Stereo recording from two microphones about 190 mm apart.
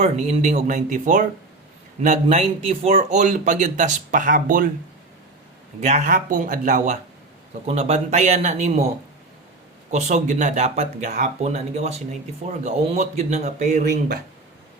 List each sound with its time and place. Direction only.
0.0 s speech: 35° right (ahead or behind)
5.8 s speech: 40° right (ahead or behind)
9.9 s speech: 40° right (ahead or behind)